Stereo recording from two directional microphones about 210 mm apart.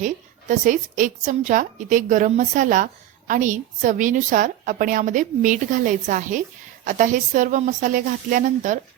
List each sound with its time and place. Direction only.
0.0 s a woman's voice: 40° right (ahead or behind)